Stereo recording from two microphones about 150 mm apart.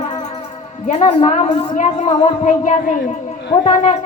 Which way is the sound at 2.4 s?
55° left (ahead or behind).